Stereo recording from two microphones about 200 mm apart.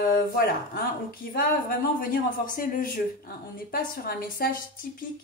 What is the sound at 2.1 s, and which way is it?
Speech, 45° left (ahead or behind).